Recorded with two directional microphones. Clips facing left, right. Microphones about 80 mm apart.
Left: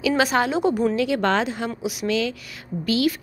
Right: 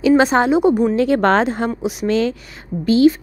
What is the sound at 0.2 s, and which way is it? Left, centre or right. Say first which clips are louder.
Speech: right 6 dB; right.